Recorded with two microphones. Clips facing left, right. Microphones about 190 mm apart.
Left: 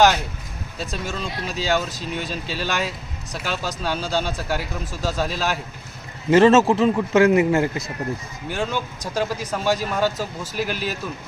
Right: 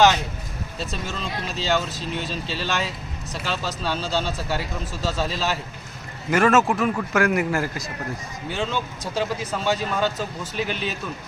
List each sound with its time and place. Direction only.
0.8 s speech: 10° left (ahead or behind)
6.3 s a man's voice: 25° left (ahead or behind); by 10.9 s 5° left (ahead or behind)